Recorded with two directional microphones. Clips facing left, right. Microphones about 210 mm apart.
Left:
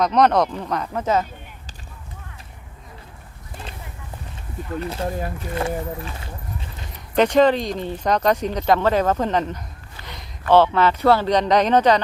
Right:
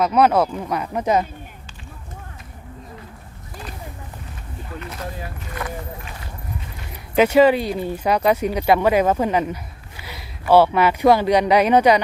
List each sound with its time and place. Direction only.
0.0 s speech: 5° right (ahead or behind)
4.8 s speech: 30° left (ahead or behind)
7.2 s speech: 10° right (ahead or behind)